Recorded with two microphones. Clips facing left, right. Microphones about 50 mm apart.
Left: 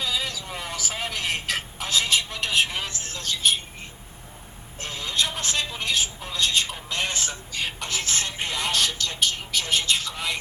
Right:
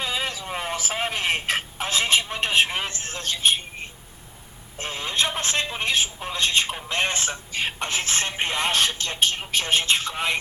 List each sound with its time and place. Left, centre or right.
0.0 s telephone: right
4.8 s speech: right